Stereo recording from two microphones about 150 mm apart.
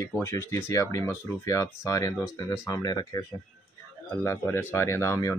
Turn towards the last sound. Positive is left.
turn(degrees=20)  # may be behind; listen again after turning